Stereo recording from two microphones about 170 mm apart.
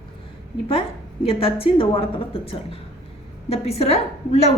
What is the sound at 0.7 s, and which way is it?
A woman's voice, 35° left (ahead or behind).